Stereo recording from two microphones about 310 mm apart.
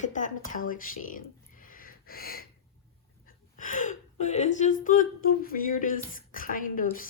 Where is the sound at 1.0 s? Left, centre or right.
Left.